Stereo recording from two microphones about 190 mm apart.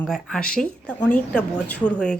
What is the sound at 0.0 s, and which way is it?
Speech, centre (ahead or behind).